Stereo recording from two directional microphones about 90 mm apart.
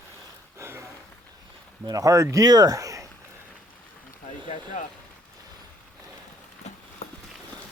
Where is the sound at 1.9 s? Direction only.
40° right (ahead or behind).